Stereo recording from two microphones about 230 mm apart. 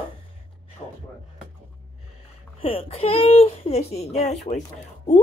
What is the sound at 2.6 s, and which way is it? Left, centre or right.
Speech, left.